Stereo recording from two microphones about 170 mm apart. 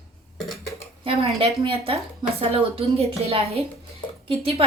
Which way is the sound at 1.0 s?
35° right (ahead or behind).